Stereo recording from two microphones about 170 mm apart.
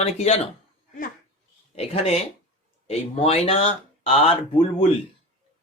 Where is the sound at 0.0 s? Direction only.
35° left (ahead or behind).